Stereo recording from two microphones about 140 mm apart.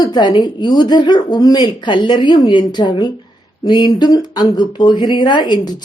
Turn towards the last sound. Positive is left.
turn(degrees=30)  # may be behind; listen again after turning